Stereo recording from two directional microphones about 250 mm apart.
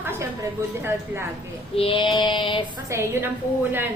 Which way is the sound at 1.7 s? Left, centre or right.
Left.